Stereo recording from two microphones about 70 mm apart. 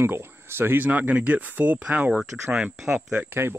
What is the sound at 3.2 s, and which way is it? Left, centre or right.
Speech, right.